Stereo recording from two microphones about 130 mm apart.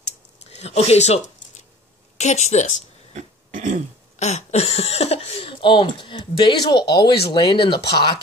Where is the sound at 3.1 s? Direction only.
65° right (ahead or behind).